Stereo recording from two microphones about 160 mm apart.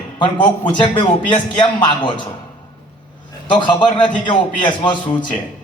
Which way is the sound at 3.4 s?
30° left (ahead or behind).